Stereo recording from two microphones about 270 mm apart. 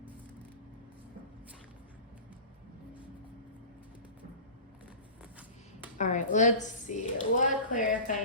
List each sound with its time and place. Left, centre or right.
6.0 s a woman's voice: left